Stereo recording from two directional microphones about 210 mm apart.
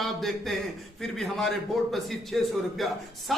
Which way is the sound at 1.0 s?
Centre (ahead or behind).